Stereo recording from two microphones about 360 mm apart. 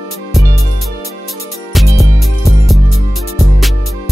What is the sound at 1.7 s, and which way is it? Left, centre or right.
Music, centre.